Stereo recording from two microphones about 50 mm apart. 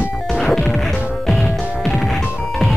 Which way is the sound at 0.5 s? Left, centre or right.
Centre.